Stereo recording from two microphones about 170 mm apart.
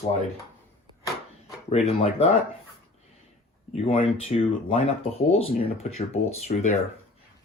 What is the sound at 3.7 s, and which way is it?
Speech, 35° left (ahead or behind).